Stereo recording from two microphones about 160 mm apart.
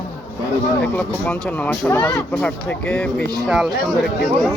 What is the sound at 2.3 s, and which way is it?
Speech, 10° left (ahead or behind).